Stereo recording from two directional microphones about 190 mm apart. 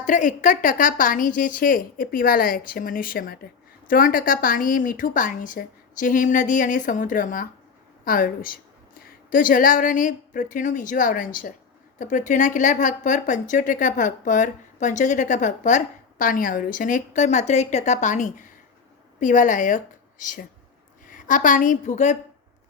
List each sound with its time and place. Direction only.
0.0 s a woman's voice: 40° left (ahead or behind)